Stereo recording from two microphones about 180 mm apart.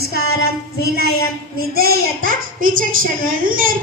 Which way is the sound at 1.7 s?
55° right (ahead or behind).